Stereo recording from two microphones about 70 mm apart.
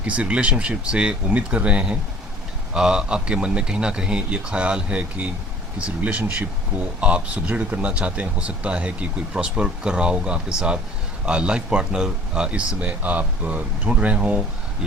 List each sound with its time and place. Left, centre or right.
0.0 s speech: centre